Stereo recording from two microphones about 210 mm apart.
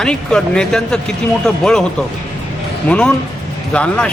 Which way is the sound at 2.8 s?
5° left (ahead or behind).